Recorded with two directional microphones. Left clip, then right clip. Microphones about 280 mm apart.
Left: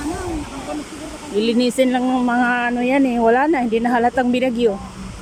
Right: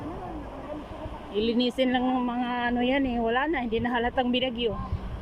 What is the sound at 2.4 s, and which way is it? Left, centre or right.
Speech, centre.